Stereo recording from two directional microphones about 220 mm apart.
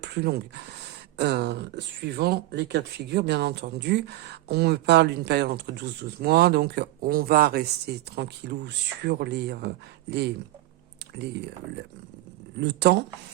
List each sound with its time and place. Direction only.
0.0 s speech: 50° right (ahead or behind)
12.5 s speech: 50° right (ahead or behind)